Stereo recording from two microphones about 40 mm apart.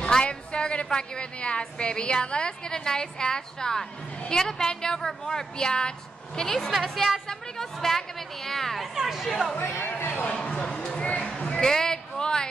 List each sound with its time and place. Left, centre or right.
0.1 s a woman's voice: left
6.7 s a woman's voice: centre
8.9 s speech: centre
9.6 s speech: left
10.3 s a sound: left
11.1 s music: left
11.6 s a sound: centre